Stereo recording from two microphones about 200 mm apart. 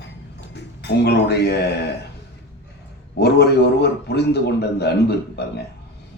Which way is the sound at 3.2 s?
55° left (ahead or behind).